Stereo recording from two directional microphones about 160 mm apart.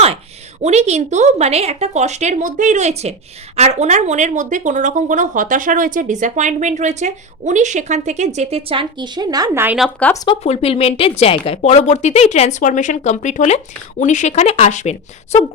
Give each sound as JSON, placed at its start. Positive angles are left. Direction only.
{"t": 0.6, "sound": "a woman's voice", "side_deg": -45}
{"t": 9.6, "sound": "speech", "side_deg": 0}
{"t": 10.4, "sound": "speech", "side_deg": 40}